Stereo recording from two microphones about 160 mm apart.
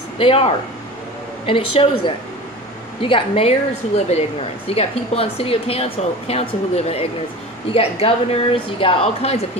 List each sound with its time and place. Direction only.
0.2 s speech: 35° left (ahead or behind)